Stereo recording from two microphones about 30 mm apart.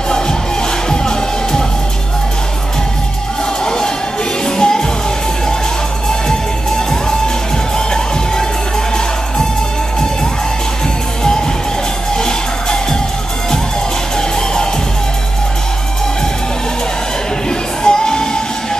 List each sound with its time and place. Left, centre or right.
0.8 s music: left
3.6 s music: left
7.7 s music: left
14.1 s music: left
17.5 s music: left